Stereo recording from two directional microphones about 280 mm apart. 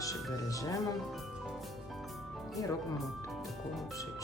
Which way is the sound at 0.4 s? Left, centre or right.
Centre.